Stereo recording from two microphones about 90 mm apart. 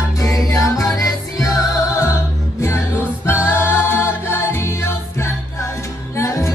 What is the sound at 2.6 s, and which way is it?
Music, 25° left (ahead or behind).